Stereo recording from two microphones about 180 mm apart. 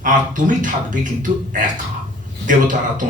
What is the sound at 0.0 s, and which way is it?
A man's voice, 45° right (ahead or behind).